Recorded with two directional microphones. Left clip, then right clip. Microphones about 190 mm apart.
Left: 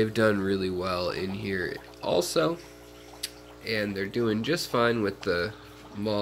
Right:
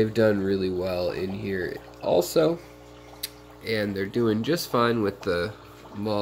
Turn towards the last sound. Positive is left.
turn(degrees=-10)  # may be behind; listen again after turning